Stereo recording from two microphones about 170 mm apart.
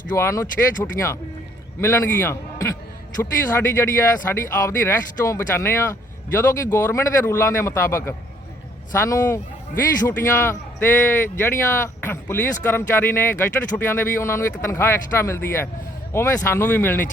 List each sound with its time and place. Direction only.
0.2 s a man's voice: 15° left (ahead or behind)